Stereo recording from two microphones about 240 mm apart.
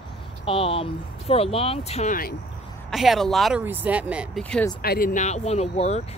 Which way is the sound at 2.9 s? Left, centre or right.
Centre.